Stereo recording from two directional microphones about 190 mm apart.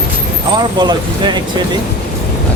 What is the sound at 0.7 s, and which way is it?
Speech, 20° right (ahead or behind).